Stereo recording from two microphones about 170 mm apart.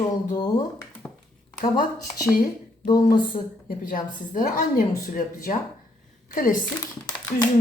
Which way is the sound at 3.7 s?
55° left (ahead or behind).